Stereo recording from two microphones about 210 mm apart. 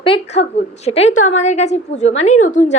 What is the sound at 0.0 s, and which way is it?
A woman's voice, 30° left (ahead or behind).